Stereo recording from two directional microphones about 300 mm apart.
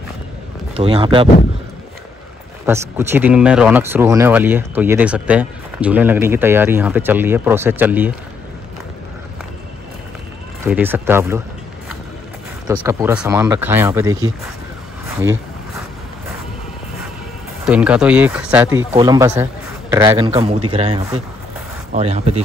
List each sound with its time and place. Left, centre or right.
0.7 s speech: centre
2.6 s speech: centre
10.6 s speech: centre
12.8 s speech: centre
15.1 s a sound: centre
17.6 s speech: centre
20.2 s speech: centre